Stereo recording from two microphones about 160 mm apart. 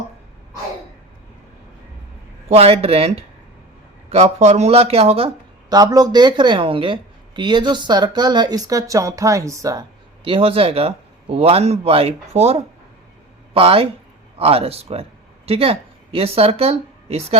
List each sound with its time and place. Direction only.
2.5 s speech: 40° right (ahead or behind)
5.6 s a woman's voice: 25° right (ahead or behind)
10.2 s speech: 35° right (ahead or behind)